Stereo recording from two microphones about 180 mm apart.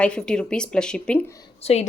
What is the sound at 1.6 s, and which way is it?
Speech, 35° left (ahead or behind).